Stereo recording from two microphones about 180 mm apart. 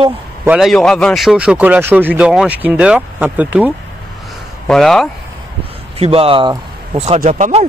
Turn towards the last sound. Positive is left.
turn(degrees=-40)  # may be behind; listen again after turning